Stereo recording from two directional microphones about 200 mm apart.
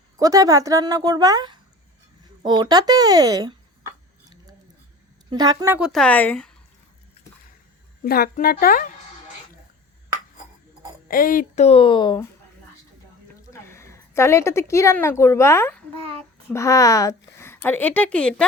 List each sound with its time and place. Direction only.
0.2 s a woman's voice: 15° right (ahead or behind)
5.3 s speech: 20° right (ahead or behind)
5.9 s speech: 5° left (ahead or behind)
8.0 s a woman's voice: 50° left (ahead or behind)
11.1 s speech: 45° left (ahead or behind); by 12.2 s 25° left (ahead or behind)
13.5 s a woman's voice: 15° left (ahead or behind)